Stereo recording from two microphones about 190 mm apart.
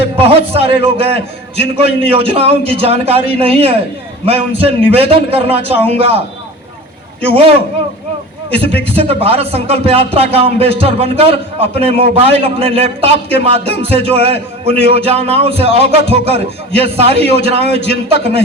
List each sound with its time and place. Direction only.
0.2 s a man's voice: 30° right (ahead or behind)
8.6 s a man's voice: 30° right (ahead or behind)